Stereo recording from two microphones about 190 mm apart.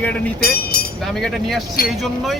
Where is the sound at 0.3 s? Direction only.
50° left (ahead or behind).